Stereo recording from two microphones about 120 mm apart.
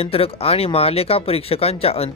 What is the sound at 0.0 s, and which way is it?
Speech, 55° left (ahead or behind).